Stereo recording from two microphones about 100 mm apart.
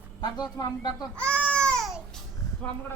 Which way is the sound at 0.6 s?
40° left (ahead or behind).